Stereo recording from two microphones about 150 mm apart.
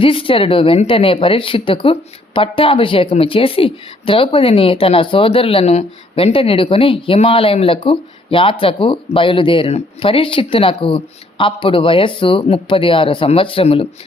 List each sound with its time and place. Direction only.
0.0 s speech: 35° left (ahead or behind)